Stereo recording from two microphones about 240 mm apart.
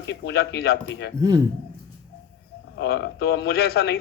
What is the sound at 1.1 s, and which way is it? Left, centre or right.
Speech, centre.